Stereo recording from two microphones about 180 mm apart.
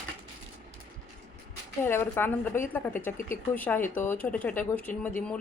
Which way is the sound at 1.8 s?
10° left (ahead or behind).